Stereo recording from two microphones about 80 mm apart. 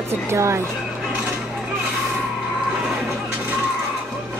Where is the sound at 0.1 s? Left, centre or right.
Right.